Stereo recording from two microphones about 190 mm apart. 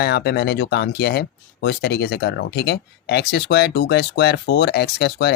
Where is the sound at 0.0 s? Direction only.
60° left (ahead or behind).